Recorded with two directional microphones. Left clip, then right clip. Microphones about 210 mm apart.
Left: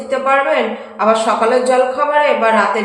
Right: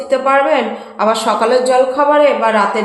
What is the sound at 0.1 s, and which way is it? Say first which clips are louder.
A woman's voice: right 2 dB; 40° right (ahead or behind).